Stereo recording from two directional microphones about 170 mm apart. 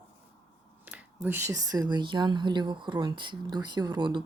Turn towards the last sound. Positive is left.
turn(degrees=-25)  # may be behind; listen again after turning